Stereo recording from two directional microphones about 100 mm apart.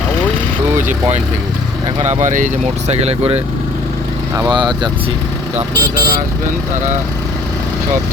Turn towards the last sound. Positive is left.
turn(degrees=-40)  # may be behind; listen again after turning